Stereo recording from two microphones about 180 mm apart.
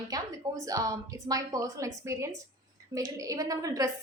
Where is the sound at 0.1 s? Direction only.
20° right (ahead or behind).